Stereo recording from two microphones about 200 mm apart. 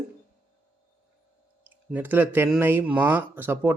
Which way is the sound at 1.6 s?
10° right (ahead or behind).